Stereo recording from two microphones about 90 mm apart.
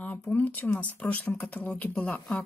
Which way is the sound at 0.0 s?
15° left (ahead or behind).